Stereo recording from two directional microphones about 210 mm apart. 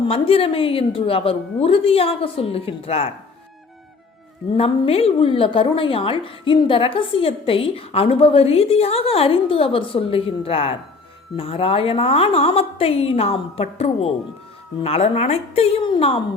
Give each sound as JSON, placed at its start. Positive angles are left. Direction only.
{"t": 0.0, "sound": "a woman's voice", "side_deg": 25}
{"t": 4.5, "sound": "a woman's voice", "side_deg": 30}